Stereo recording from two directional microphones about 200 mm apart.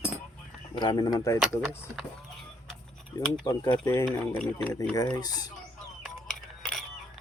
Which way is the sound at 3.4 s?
20° left (ahead or behind).